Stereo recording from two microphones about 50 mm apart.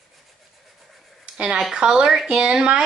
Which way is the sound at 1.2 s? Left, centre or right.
Centre.